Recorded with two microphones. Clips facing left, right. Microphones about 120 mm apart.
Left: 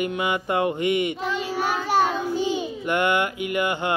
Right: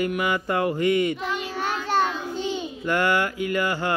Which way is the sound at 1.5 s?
10° left (ahead or behind).